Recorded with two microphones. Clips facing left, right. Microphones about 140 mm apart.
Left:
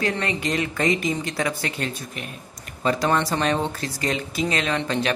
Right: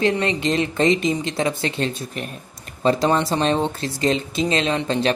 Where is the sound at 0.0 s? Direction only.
25° right (ahead or behind).